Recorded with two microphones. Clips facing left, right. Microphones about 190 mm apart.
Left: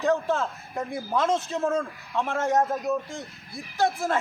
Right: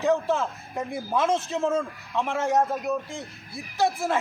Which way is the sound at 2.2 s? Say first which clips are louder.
Even; 15° right (ahead or behind).